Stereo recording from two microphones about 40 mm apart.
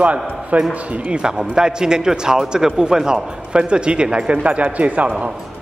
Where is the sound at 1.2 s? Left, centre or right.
Centre; by 5.1 s right.